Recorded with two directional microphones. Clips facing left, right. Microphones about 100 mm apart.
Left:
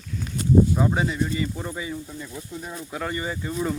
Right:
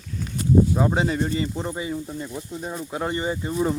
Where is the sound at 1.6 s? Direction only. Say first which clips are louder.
Right 3 dB; 25° right (ahead or behind).